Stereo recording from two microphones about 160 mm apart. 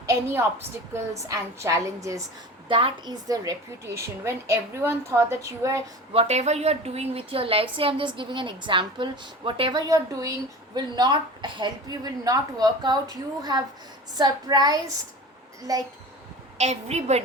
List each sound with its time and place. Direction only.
0.0 s a woman's voice: 20° right (ahead or behind)
2.6 s a woman's voice: 30° right (ahead or behind)
3.2 s a woman's voice: 20° right (ahead or behind)
6.1 s a woman's voice: 45° right (ahead or behind); by 15.8 s 20° right (ahead or behind)
16.6 s a woman's voice: 45° right (ahead or behind)